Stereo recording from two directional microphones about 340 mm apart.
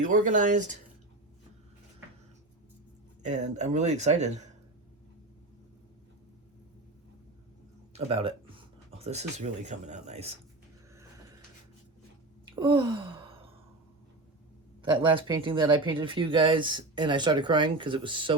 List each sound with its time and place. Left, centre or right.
0.0 s speech: right
3.2 s speech: centre
7.9 s speech: centre
12.5 s sigh: centre
14.8 s speech: centre